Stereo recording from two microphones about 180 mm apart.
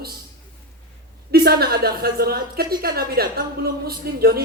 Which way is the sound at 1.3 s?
60° right (ahead or behind).